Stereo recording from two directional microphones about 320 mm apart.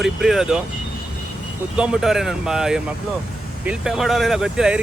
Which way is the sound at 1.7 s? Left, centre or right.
Centre.